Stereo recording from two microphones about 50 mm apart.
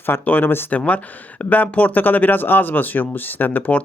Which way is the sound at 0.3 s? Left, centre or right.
Left.